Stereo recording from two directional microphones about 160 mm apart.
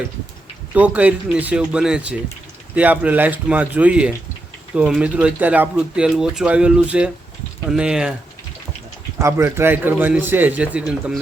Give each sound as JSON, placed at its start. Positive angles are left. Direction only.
{"t": 0.7, "sound": "speech", "side_deg": -10}
{"t": 9.1, "sound": "speech", "side_deg": -15}